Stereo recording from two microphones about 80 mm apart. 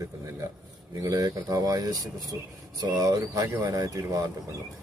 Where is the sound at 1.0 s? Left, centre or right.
Right.